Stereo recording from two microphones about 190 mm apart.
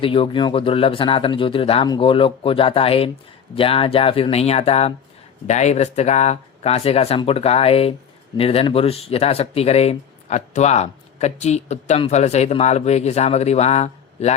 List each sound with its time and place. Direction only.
0.0 s speech: 30° left (ahead or behind)